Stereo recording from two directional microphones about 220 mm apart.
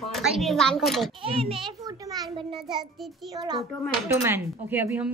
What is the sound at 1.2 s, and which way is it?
A child's voice, 25° right (ahead or behind).